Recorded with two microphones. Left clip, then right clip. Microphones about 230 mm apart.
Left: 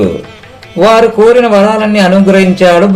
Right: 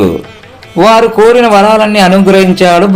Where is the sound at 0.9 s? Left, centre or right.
Right.